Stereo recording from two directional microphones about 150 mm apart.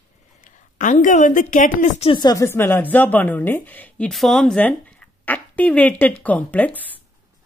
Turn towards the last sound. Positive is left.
turn(degrees=10)  # may be behind; listen again after turning